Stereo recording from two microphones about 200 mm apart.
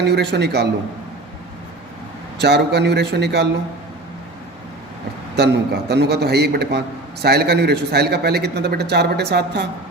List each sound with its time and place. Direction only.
0.0 s a man's voice: 60° right (ahead or behind)
2.4 s a man's voice: 55° right (ahead or behind)
5.4 s a man's voice: 55° right (ahead or behind)